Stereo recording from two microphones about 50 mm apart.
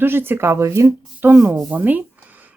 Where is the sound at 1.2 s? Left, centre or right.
Right.